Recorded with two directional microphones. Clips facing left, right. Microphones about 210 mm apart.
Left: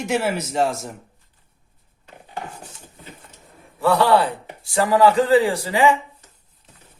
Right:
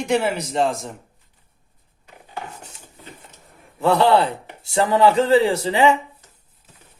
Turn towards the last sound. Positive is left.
turn(degrees=-25)  # may be behind; listen again after turning